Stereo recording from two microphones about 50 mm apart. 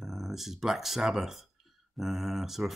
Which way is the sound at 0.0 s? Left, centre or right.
Centre.